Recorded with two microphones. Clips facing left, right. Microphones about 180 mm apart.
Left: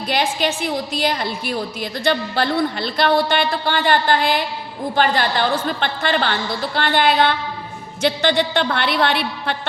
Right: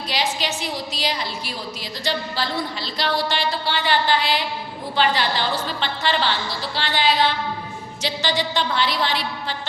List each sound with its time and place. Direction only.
0.1 s a woman's voice: 55° left (ahead or behind)